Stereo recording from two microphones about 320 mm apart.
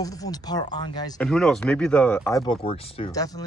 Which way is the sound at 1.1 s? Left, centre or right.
Centre.